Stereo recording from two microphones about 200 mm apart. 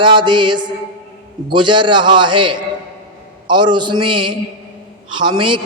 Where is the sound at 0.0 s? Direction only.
25° right (ahead or behind).